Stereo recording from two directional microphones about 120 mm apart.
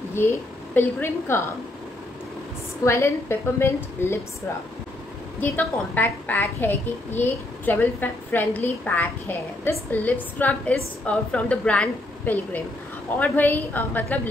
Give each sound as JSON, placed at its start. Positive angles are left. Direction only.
{"t": 0.7, "sound": "a woman's voice", "side_deg": 20}
{"t": 2.8, "sound": "a woman's voice", "side_deg": 20}
{"t": 5.4, "sound": "a woman's voice", "side_deg": 15}